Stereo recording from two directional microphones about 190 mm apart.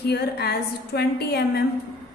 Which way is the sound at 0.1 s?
60° left (ahead or behind).